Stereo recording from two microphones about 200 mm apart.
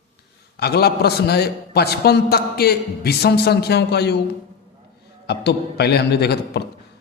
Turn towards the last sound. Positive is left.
turn(degrees=55)  # may be behind; listen again after turning